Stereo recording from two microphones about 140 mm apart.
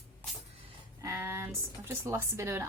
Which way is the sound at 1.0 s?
20° right (ahead or behind).